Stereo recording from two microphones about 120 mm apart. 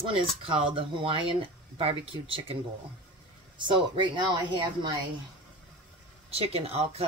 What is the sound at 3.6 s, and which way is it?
Speech, 40° right (ahead or behind).